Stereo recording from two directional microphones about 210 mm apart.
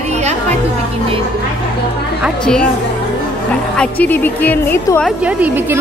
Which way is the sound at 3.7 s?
5° left (ahead or behind).